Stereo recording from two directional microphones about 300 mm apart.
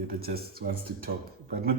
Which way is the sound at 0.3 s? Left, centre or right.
Right.